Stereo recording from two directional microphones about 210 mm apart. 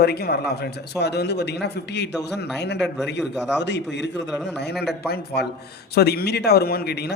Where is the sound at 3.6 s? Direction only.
55° left (ahead or behind).